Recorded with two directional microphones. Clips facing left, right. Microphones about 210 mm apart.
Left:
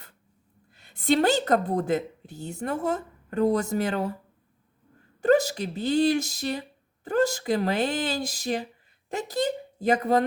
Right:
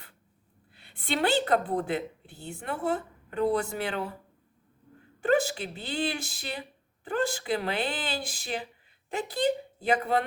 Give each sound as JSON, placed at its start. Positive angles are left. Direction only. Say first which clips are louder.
{"t": 0.7, "sound": "a woman's voice", "louder": "left 9 dB", "side_deg": 45}
{"t": 5.2, "sound": "a woman's voice", "louder": "left 4 dB", "side_deg": 40}